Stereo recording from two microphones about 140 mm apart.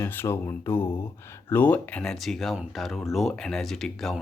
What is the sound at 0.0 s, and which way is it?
Speech, 15° left (ahead or behind).